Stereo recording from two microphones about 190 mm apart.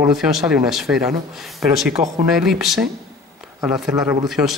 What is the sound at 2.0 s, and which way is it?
Speech, 40° right (ahead or behind).